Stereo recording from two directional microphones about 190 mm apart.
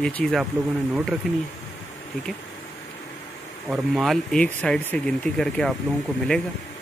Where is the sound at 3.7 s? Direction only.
Centre (ahead or behind).